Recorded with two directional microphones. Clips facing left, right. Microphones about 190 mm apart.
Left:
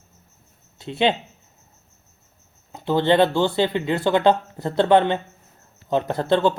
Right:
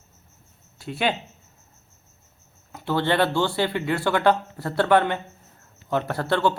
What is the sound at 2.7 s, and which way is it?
Speech, 20° left (ahead or behind).